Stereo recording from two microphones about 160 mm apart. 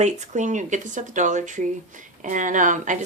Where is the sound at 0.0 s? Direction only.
50° right (ahead or behind).